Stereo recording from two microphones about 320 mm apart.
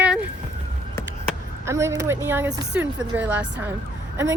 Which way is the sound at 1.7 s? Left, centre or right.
Centre.